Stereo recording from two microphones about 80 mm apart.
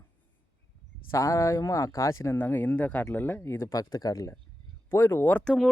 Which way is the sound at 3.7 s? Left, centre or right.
Left.